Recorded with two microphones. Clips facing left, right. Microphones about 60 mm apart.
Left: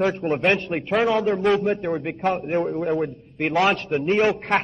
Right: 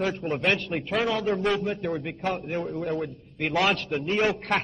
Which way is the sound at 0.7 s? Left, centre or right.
Left.